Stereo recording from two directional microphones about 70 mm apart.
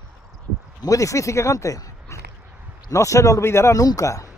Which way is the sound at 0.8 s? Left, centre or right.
Left.